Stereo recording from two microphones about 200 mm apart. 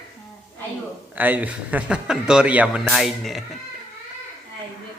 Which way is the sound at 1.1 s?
10° right (ahead or behind).